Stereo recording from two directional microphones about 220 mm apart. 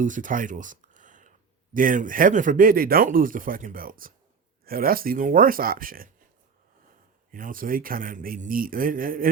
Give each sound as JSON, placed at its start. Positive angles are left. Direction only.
{"t": 0.0, "sound": "speech", "side_deg": -35}
{"t": 7.3, "sound": "speech", "side_deg": -40}